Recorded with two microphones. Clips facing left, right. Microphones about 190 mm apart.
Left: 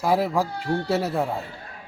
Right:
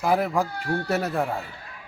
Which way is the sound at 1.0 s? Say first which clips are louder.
Left 1 dB; 5° left (ahead or behind).